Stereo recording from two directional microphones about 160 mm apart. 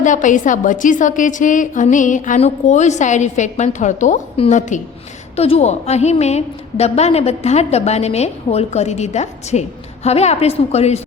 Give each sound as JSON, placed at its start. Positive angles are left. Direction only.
{"t": 0.0, "sound": "a woman's voice", "side_deg": 50}